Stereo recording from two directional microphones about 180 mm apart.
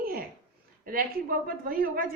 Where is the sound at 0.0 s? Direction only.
55° right (ahead or behind).